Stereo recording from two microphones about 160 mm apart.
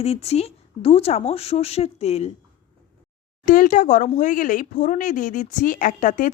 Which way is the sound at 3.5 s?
55° left (ahead or behind).